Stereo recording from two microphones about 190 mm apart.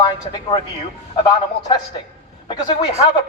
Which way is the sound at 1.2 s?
20° left (ahead or behind).